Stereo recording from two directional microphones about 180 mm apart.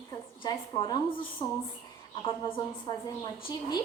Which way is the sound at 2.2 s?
30° left (ahead or behind).